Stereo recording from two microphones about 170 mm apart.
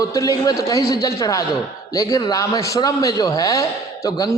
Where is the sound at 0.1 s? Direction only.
20° left (ahead or behind).